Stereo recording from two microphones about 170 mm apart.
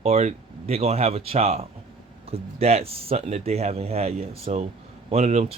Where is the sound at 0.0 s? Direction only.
40° right (ahead or behind).